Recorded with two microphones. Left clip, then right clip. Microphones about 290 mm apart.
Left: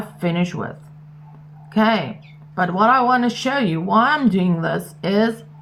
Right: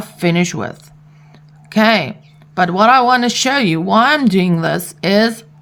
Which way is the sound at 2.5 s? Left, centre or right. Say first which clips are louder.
Right 5 dB; right.